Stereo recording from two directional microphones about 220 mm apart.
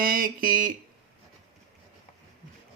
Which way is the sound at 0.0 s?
40° right (ahead or behind).